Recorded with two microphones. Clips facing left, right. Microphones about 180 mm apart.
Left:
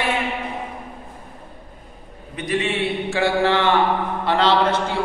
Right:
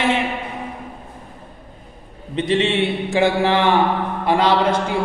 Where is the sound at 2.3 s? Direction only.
25° right (ahead or behind).